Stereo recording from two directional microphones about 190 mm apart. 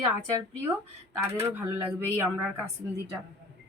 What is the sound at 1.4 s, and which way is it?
A woman's voice, 10° right (ahead or behind).